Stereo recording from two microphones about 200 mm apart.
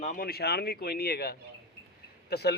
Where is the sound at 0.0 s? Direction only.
45° left (ahead or behind).